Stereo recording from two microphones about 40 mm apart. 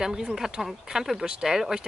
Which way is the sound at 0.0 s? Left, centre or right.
Centre.